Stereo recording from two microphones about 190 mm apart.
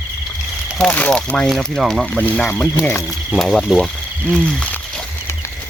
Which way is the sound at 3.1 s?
Centre (ahead or behind).